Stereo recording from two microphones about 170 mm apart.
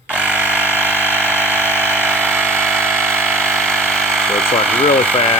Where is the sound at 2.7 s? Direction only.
10° right (ahead or behind).